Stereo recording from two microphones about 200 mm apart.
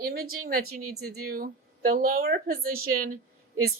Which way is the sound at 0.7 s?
90° right.